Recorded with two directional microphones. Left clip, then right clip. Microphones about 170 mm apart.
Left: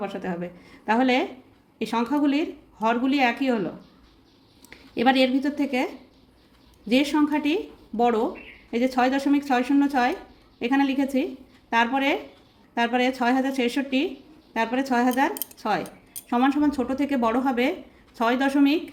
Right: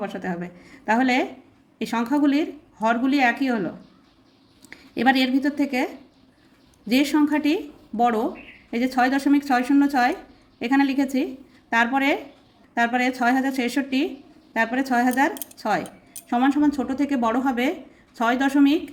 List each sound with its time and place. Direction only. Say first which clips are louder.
0.0 s a woman's voice: right 1 dB; 15° right (ahead or behind)
4.7 s a woman's voice: right 1 dB; 20° right (ahead or behind)